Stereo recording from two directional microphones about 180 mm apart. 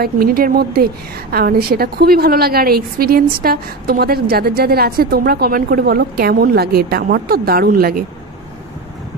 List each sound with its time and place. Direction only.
0.0 s a woman's voice: 55° right (ahead or behind)